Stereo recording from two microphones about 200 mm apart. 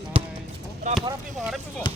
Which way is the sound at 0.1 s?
25° right (ahead or behind).